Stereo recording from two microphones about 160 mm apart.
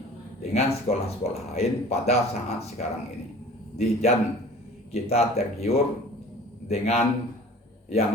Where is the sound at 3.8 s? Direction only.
40° left (ahead or behind).